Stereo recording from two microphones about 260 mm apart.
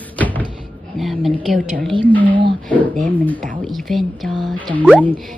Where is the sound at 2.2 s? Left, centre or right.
Centre.